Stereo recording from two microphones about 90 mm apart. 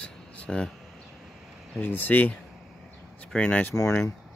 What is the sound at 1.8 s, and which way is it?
Speech, 20° left (ahead or behind).